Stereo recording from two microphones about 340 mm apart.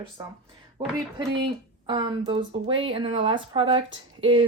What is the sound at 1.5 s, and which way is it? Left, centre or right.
Speech, centre.